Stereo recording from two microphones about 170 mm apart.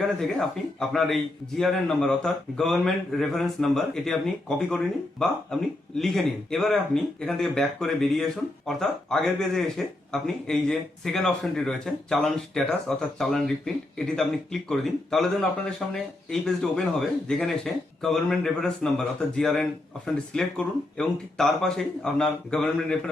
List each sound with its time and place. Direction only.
0.2 s speech: 5° left (ahead or behind)